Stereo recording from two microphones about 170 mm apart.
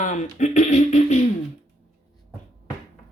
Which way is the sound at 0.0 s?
45° left (ahead or behind).